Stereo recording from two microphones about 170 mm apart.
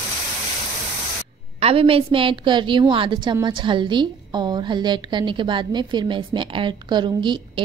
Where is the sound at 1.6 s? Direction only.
35° right (ahead or behind).